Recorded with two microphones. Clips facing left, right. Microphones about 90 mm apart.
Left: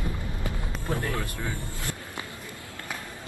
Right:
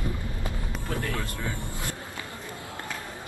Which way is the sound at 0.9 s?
20° left (ahead or behind).